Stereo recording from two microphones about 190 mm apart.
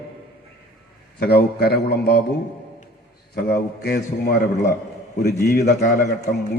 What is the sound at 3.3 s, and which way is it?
Speech, 55° left (ahead or behind).